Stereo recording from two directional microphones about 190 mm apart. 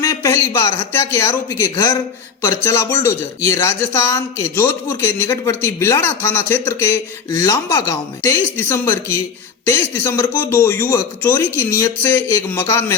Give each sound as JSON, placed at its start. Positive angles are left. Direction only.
{"t": 0.0, "sound": "speech", "side_deg": 15}